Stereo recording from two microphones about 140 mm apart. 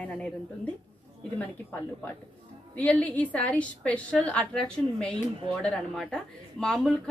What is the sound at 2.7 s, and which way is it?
Speech, 10° left (ahead or behind).